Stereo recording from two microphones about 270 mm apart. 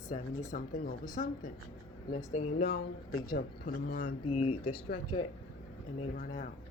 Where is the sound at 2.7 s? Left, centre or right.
Left.